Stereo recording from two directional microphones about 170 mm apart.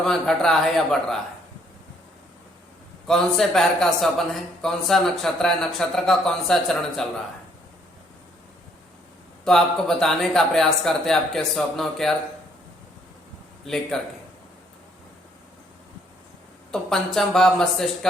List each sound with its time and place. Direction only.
0.0 s speech: 5° left (ahead or behind)
3.1 s speech: centre (ahead or behind)
9.4 s speech: 5° left (ahead or behind)
13.7 s speech: centre (ahead or behind)
16.7 s speech: centre (ahead or behind)